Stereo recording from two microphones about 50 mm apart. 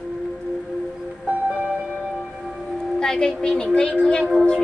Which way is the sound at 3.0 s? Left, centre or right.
Centre.